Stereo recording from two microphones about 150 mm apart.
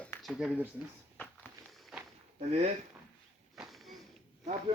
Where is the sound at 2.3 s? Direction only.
45° right (ahead or behind).